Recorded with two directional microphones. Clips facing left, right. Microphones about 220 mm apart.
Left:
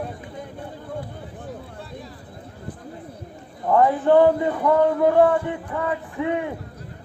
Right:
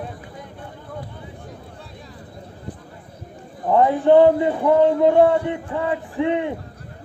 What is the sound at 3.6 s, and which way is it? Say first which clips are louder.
A man's voice: right 2 dB; 20° right (ahead or behind).